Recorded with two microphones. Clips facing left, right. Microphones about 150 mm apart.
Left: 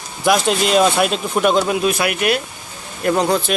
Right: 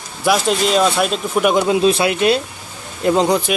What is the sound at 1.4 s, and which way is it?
Speech, 15° right (ahead or behind).